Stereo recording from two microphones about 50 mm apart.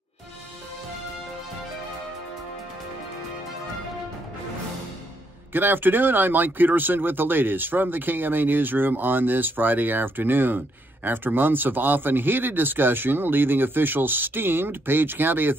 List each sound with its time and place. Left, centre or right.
5.5 s speech: right